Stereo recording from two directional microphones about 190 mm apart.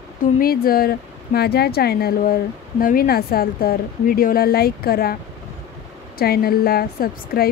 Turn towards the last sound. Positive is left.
turn(degrees=50)  # may be behind; listen again after turning